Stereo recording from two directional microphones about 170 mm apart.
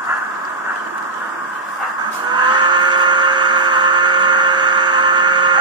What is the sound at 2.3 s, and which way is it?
Vehicle, 25° right (ahead or behind).